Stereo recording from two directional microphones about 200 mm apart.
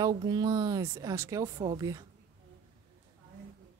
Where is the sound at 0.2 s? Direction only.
20° right (ahead or behind).